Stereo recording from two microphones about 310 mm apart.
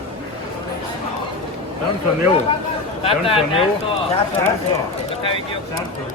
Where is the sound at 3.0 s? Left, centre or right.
Centre.